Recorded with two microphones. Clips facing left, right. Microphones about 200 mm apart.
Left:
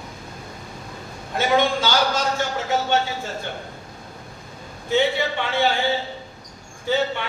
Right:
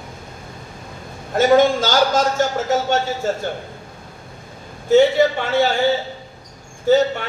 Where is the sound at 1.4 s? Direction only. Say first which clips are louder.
Right 7 dB; 45° right (ahead or behind).